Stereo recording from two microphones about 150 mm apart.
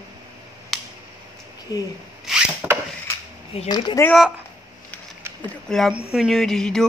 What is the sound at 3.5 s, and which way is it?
Speech, 40° left (ahead or behind).